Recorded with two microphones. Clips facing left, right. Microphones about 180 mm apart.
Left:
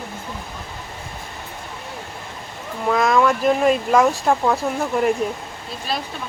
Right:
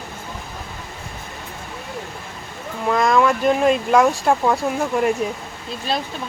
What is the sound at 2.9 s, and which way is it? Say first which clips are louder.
Speech: even; centre (ahead or behind).